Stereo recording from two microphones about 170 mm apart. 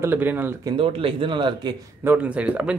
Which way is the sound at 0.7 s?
30° right (ahead or behind).